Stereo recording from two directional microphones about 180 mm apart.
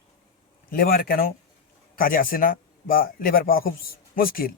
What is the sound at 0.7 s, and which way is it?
A man's voice, 55° left (ahead or behind).